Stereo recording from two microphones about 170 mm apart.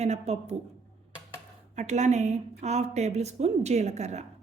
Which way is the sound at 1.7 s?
40° right (ahead or behind).